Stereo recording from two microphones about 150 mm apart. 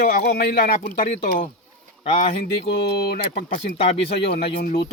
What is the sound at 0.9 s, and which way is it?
Speech, 65° left (ahead or behind).